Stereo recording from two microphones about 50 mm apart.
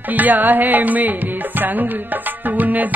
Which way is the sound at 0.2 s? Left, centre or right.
Right.